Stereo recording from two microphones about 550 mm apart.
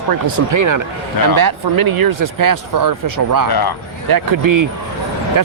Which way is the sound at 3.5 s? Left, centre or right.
Left.